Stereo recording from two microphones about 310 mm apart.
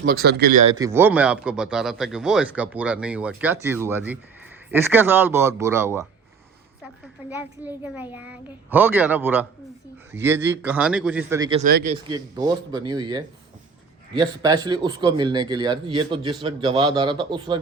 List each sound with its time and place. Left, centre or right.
0.0 s speech: right
0.7 s speech: centre
7.3 s speech: centre
11.6 s speech: right
12.0 s speech: centre